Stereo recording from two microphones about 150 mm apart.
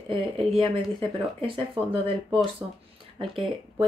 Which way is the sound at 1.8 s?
35° right (ahead or behind).